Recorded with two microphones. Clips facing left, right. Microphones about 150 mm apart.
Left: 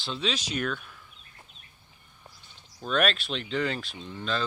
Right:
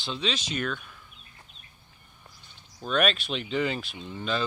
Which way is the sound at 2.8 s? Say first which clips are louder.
Right 1 dB; centre (ahead or behind).